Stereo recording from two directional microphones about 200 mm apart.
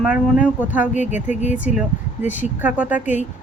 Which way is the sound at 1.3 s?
35° left (ahead or behind).